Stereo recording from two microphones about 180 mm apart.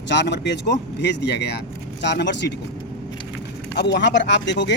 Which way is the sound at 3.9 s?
80° left.